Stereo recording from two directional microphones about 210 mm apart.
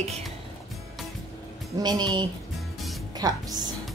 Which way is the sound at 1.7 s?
20° right (ahead or behind).